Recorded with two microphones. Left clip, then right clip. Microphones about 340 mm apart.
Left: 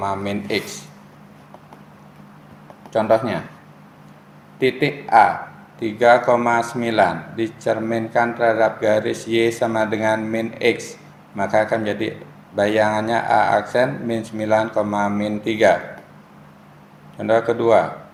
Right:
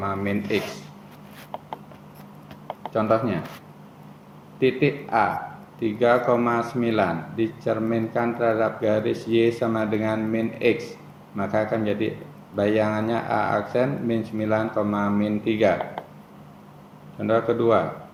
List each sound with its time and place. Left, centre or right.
0.0 s speech: left
2.9 s speech: left
4.6 s speech: left
17.2 s speech: left